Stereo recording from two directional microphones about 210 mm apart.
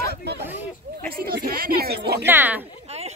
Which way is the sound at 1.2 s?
45° right (ahead or behind).